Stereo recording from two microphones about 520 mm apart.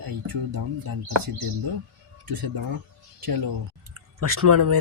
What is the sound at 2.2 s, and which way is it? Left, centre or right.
Speech, right.